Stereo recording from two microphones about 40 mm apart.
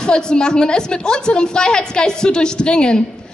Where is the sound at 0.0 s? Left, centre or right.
Centre.